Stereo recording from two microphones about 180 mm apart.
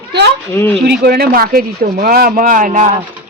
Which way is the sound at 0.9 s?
60° right (ahead or behind).